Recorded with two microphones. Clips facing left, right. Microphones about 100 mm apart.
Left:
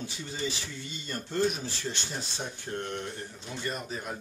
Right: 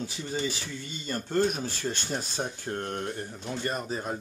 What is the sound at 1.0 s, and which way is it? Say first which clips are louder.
Speech: right 3 dB; 50° right (ahead or behind).